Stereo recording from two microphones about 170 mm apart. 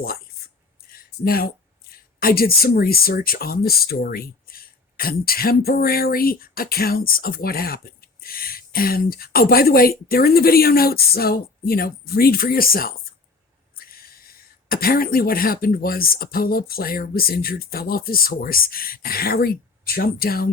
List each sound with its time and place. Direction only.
0.9 s speech: 60° left (ahead or behind)